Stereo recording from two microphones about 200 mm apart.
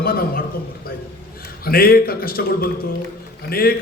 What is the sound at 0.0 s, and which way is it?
Speech, 45° left (ahead or behind).